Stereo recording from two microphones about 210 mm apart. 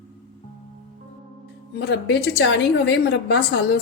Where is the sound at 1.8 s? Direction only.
55° left (ahead or behind).